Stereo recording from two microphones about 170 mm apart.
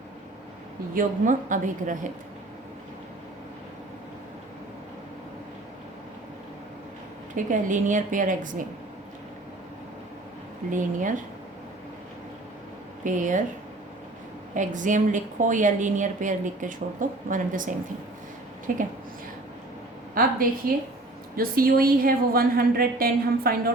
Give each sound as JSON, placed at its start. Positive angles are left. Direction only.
{"t": 0.9, "sound": "a woman's voice", "side_deg": -50}
{"t": 7.3, "sound": "a woman's voice", "side_deg": -50}
{"t": 10.7, "sound": "a woman's voice", "side_deg": -50}
{"t": 13.1, "sound": "a woman's voice", "side_deg": -50}
{"t": 14.5, "sound": "a woman's voice", "side_deg": -50}
{"t": 18.7, "sound": "a woman's voice", "side_deg": -55}
{"t": 20.2, "sound": "a woman's voice", "side_deg": -60}